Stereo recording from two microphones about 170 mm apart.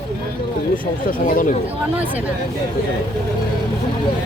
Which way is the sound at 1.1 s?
55° left (ahead or behind).